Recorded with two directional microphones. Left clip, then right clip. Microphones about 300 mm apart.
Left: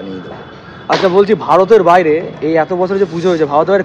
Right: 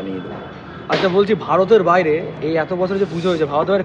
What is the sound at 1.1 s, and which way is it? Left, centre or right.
Speech, centre.